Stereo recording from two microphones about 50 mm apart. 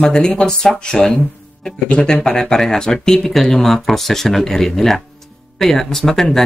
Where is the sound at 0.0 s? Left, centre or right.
Centre.